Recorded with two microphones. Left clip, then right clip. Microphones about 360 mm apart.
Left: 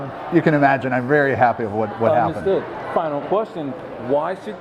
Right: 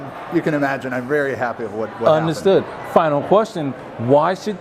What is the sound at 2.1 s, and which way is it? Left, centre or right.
Speech, right.